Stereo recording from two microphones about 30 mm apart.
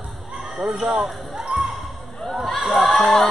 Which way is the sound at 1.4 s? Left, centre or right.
Right.